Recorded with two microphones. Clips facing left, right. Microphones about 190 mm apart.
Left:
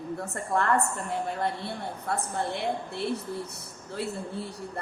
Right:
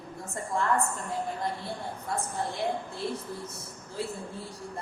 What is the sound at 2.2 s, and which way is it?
Speech, 65° left (ahead or behind).